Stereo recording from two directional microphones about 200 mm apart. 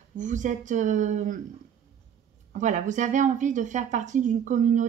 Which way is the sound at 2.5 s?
40° right (ahead or behind).